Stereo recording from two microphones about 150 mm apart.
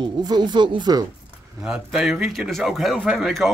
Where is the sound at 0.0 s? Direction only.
30° right (ahead or behind).